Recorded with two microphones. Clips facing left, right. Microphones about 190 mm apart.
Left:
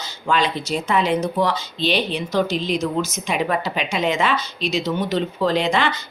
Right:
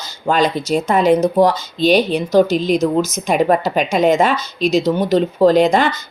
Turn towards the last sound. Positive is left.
turn(degrees=-40)  # may be behind; listen again after turning